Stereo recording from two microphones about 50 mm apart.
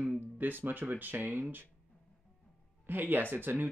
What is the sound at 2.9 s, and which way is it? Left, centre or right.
Speech, right.